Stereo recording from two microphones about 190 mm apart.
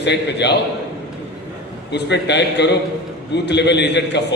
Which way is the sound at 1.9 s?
65° left (ahead or behind).